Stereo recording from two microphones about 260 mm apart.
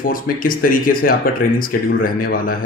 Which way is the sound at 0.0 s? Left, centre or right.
Left.